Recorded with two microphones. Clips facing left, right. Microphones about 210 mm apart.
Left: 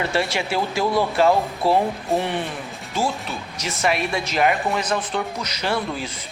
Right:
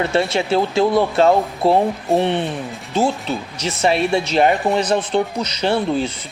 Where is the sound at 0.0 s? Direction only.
25° right (ahead or behind).